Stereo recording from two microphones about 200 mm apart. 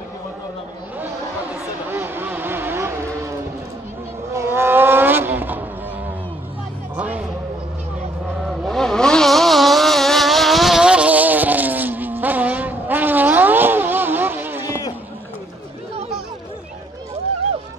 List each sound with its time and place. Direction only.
1.0 s a sound: 10° right (ahead or behind)
4.3 s vehicle: 15° right (ahead or behind)
7.0 s music: 5° right (ahead or behind)
8.5 s vehicle: centre (ahead or behind)
14.7 s run: 20° left (ahead or behind)